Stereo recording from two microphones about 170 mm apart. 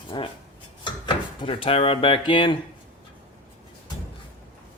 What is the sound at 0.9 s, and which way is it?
Speech, 30° left (ahead or behind).